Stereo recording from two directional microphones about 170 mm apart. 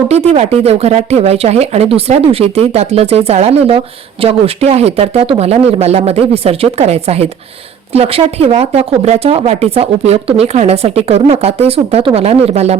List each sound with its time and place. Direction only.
0.1 s speech: 40° right (ahead or behind)